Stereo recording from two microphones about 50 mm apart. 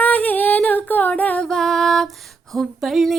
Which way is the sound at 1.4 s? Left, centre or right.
Centre.